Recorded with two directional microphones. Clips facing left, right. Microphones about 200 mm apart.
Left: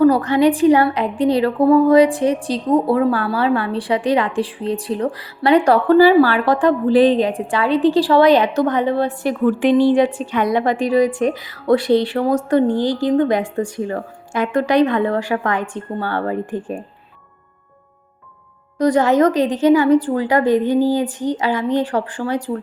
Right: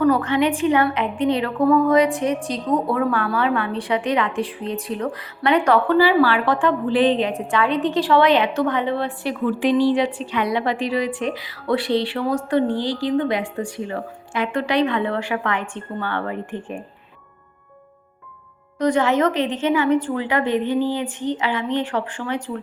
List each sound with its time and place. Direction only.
0.0 s a woman's voice: 35° left (ahead or behind)
18.8 s a woman's voice: 40° left (ahead or behind)